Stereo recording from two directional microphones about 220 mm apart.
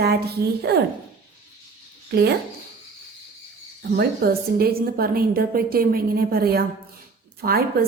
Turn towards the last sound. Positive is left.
turn(degrees=-45)  # may be behind; listen again after turning